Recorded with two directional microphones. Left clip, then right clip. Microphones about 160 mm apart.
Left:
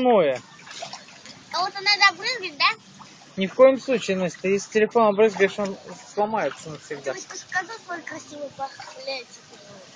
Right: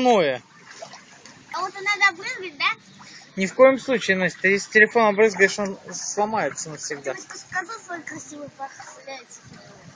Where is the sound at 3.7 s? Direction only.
5° right (ahead or behind).